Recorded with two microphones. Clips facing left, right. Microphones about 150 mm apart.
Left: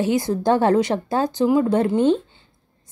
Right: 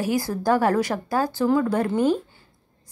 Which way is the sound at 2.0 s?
25° left (ahead or behind).